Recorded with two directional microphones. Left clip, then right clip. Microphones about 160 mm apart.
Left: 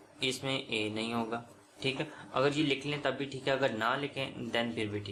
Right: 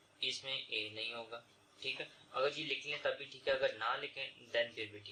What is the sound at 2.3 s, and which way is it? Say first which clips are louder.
Speech: left 7 dB; 35° left (ahead or behind).